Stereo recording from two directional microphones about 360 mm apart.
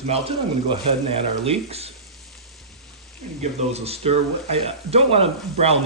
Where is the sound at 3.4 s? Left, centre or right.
Centre.